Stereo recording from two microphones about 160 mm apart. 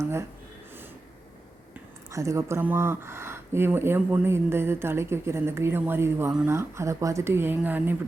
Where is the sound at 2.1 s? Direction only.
20° right (ahead or behind).